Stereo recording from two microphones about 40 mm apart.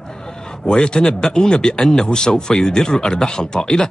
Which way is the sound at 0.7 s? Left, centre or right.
Left.